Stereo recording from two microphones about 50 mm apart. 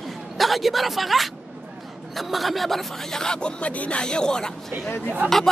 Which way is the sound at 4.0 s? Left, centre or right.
Centre.